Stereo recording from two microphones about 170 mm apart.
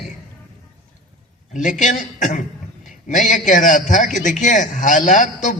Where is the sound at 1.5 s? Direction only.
45° left (ahead or behind).